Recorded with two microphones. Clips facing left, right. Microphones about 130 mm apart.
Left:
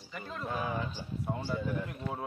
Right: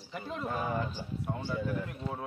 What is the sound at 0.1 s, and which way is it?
Speech, 20° right (ahead or behind).